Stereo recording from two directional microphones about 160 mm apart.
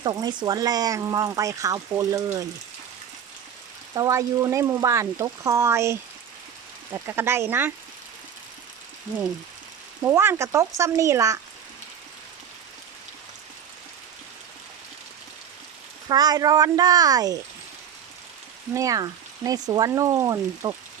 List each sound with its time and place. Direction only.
0.0 s speech: 25° right (ahead or behind)
3.9 s speech: 20° right (ahead or behind)
10.0 s speech: 15° right (ahead or behind)
16.0 s speech: 25° right (ahead or behind)
18.7 s speech: 20° right (ahead or behind)